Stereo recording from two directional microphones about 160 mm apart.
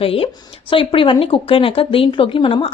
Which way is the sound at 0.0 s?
35° left (ahead or behind).